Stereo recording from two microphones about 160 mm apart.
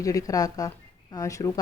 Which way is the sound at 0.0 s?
20° left (ahead or behind).